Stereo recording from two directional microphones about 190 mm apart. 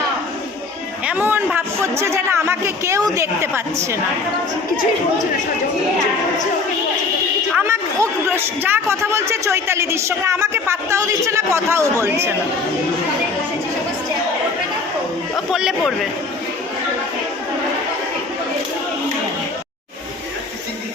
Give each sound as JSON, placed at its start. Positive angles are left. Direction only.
{"t": 1.0, "sound": "speech", "side_deg": -10}
{"t": 7.5, "sound": "speech", "side_deg": -15}
{"t": 15.5, "sound": "speech", "side_deg": 0}